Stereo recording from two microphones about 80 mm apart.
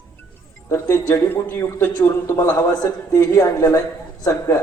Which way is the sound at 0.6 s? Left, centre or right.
Left.